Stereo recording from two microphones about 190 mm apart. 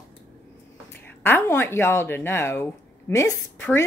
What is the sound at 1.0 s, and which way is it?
A woman's voice, 10° left (ahead or behind).